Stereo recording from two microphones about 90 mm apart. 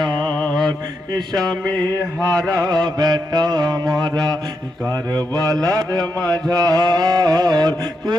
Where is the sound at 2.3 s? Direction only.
45° right (ahead or behind).